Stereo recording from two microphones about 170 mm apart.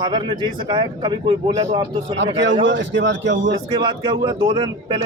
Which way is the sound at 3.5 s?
30° right (ahead or behind).